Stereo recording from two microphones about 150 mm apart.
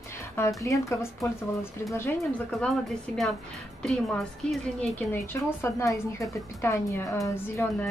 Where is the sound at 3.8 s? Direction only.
5° left (ahead or behind).